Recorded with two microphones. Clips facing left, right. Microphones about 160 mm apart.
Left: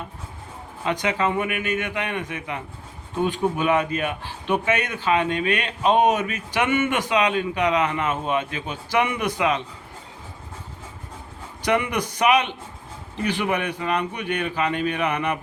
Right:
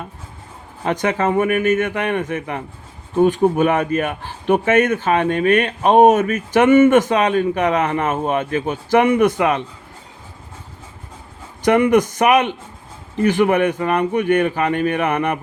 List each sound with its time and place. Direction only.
0.9 s speech: 45° right (ahead or behind)
11.6 s speech: 50° right (ahead or behind)